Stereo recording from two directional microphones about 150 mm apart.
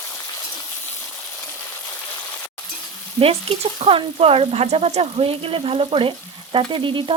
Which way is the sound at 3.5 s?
40° right (ahead or behind).